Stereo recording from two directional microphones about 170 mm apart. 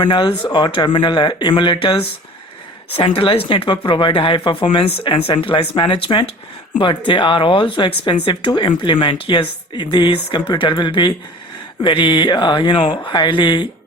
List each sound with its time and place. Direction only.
0.0 s speech: 30° left (ahead or behind)
3.2 s speech: 30° left (ahead or behind)